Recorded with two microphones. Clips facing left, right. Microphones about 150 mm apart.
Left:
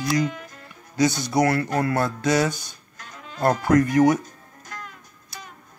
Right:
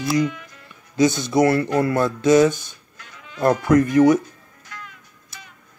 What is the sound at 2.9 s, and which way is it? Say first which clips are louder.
Sheep: even; 40° left (ahead or behind).